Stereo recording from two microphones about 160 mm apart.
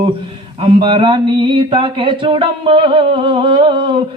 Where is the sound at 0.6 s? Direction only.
30° right (ahead or behind).